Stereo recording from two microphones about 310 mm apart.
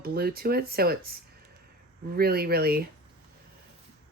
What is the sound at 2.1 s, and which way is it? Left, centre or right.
Speech, right.